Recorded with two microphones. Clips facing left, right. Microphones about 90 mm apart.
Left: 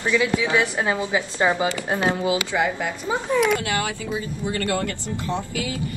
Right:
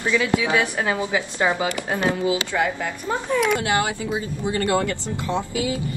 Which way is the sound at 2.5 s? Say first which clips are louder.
Even; 10° left (ahead or behind).